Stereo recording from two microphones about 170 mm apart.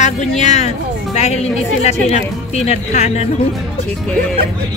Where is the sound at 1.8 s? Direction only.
40° left (ahead or behind).